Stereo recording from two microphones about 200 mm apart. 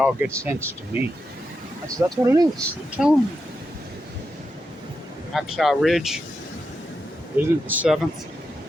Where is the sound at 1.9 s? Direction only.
20° right (ahead or behind).